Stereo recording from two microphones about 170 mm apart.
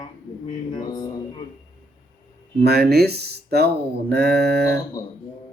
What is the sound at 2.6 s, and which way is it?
Speech, 70° right (ahead or behind).